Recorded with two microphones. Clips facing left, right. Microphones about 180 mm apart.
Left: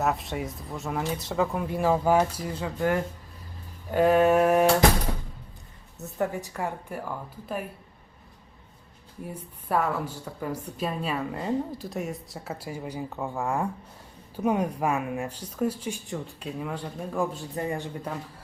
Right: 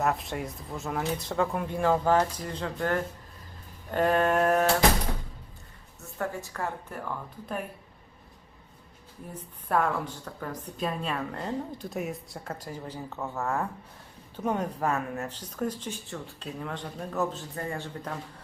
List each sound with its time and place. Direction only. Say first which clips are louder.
0.0 s a woman's voice: left 1 dB; centre (ahead or behind)
6.0 s a woman's voice: left 5 dB; 20° left (ahead or behind)
9.2 s a woman's voice: left 3 dB; 10° left (ahead or behind)